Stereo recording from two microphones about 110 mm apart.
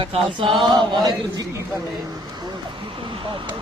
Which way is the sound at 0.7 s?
45° right (ahead or behind).